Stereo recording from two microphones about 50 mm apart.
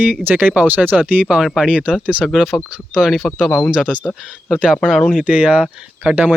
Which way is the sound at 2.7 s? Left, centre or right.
Centre.